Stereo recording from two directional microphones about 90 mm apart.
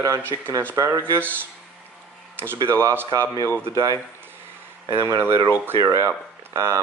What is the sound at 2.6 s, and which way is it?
Speech, 35° right (ahead or behind).